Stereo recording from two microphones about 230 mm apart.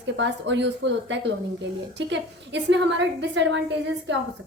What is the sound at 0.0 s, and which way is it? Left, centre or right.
A woman's voice, right.